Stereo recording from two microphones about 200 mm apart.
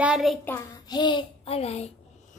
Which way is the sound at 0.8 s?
20° left (ahead or behind).